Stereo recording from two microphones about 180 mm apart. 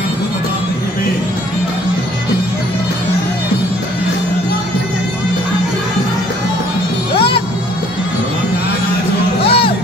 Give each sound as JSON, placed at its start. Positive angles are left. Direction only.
{"t": 7.2, "sound": "music", "side_deg": 30}
{"t": 9.4, "sound": "music", "side_deg": 30}